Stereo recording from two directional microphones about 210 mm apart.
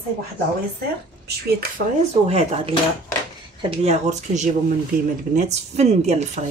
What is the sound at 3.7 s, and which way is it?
A woman's voice, 30° right (ahead or behind).